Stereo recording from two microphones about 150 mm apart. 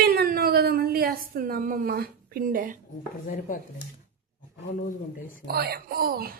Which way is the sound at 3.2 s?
65° left (ahead or behind).